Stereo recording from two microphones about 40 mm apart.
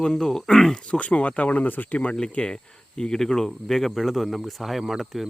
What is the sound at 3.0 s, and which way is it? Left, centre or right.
Speech, centre.